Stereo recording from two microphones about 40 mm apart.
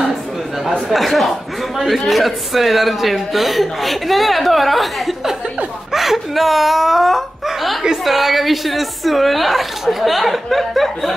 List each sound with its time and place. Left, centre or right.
0.8 s a man's voice: centre